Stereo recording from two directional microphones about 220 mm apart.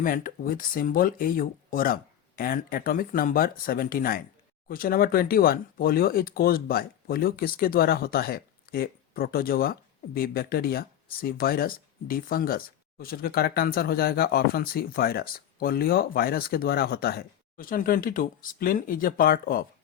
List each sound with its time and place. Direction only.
0.0 s speech: 40° left (ahead or behind)